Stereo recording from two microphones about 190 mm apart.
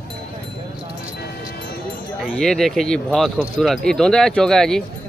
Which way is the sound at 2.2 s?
Centre (ahead or behind).